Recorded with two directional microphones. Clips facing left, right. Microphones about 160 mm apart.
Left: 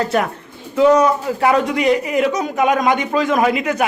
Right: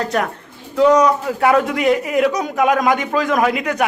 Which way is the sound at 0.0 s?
5° left (ahead or behind).